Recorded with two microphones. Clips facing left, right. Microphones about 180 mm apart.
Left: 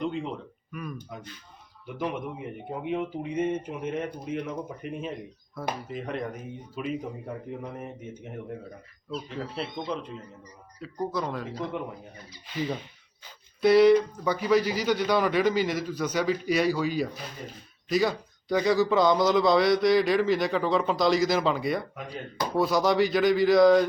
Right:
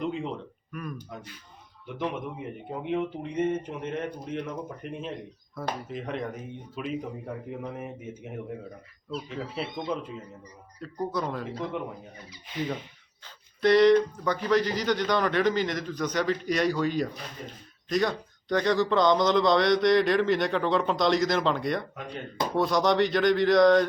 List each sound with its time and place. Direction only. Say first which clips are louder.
0.0 s a man's voice: even; centre (ahead or behind)
13.2 s a man's voice: left 1 dB; 5° left (ahead or behind)